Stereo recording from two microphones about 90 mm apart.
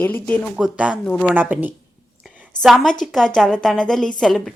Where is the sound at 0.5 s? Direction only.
15° right (ahead or behind).